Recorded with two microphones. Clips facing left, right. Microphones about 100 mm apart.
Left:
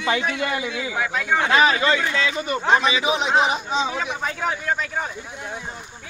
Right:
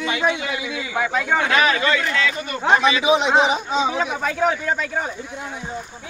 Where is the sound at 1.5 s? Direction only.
30° left (ahead or behind).